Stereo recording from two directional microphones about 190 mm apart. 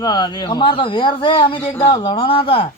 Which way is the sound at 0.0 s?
20° left (ahead or behind).